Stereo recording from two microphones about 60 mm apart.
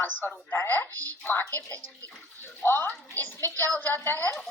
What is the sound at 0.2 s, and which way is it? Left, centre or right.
A woman's voice, left.